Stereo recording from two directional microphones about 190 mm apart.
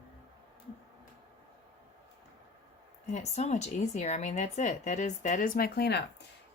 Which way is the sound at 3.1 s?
35° left (ahead or behind).